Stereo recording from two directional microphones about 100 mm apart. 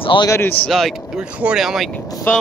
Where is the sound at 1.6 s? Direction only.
5° right (ahead or behind).